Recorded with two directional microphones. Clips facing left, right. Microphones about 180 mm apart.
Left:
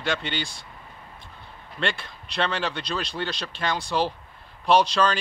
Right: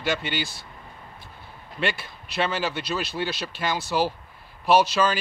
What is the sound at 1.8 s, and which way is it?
Speech, 5° right (ahead or behind).